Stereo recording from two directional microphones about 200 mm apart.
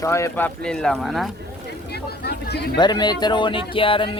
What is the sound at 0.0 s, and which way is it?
Speech, 15° left (ahead or behind).